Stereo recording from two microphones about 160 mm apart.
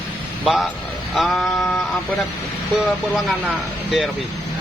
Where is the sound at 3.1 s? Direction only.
Centre (ahead or behind).